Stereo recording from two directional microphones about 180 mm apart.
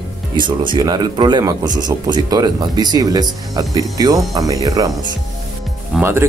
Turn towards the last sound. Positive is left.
turn(degrees=-15)  # may be behind; listen again after turning